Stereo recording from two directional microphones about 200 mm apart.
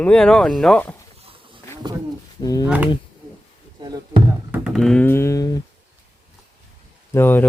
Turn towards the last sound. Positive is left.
turn(degrees=10)  # may be behind; listen again after turning